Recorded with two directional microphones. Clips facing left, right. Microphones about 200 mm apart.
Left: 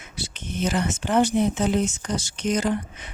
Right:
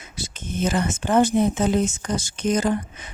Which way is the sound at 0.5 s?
50° right (ahead or behind).